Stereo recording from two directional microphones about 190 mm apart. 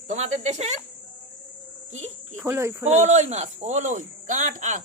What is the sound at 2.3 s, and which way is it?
Speech, 15° right (ahead or behind).